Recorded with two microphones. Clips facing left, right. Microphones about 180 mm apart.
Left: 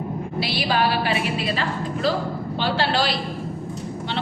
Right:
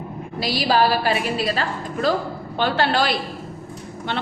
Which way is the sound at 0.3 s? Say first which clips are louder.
Right 4 dB; 40° right (ahead or behind).